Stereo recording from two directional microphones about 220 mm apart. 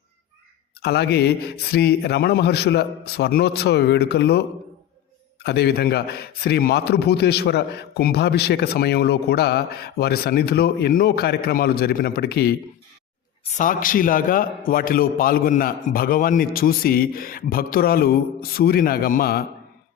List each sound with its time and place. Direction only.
0.8 s a man's voice: 45° left (ahead or behind)